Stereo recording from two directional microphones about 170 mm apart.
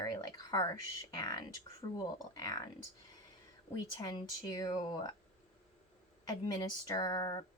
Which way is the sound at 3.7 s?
25° left (ahead or behind).